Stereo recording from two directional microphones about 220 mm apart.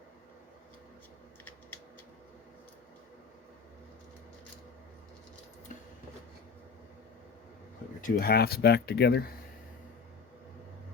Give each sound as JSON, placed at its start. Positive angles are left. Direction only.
{"t": 8.0, "sound": "speech", "side_deg": 45}